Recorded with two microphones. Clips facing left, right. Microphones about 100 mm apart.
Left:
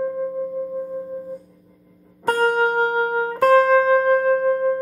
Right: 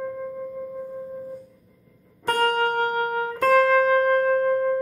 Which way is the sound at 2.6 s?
25° left (ahead or behind).